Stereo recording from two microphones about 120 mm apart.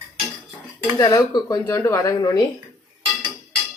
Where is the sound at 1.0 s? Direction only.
35° left (ahead or behind).